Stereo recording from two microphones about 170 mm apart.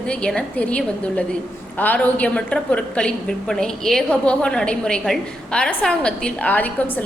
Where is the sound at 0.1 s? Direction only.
5° left (ahead or behind).